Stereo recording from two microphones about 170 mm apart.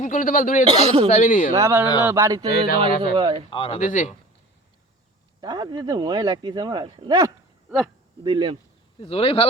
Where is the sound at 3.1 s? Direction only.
30° right (ahead or behind).